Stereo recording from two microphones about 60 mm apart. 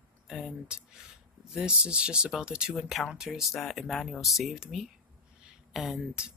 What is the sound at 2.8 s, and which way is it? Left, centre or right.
Speech, centre.